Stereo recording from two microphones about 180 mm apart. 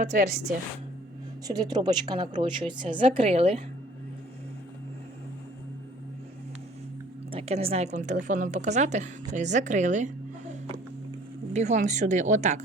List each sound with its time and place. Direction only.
0.0 s a woman's voice: 50° right (ahead or behind)
1.5 s a woman's voice: 20° right (ahead or behind)
7.3 s a woman's voice: 35° right (ahead or behind)
11.5 s a woman's voice: 40° right (ahead or behind)